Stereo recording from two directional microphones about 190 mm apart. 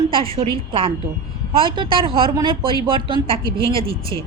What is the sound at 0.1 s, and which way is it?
Speech, 30° right (ahead or behind).